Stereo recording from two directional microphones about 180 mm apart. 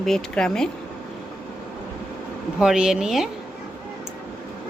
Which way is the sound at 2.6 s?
5° right (ahead or behind).